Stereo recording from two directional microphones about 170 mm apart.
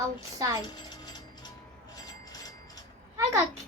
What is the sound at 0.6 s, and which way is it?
Pulleys, 25° left (ahead or behind).